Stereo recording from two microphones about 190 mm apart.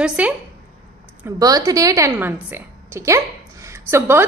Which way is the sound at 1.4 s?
20° right (ahead or behind).